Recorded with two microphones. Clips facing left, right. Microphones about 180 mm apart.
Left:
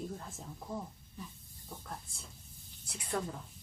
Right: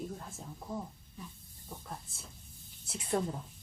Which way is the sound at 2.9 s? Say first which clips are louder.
Right 4 dB; 25° right (ahead or behind).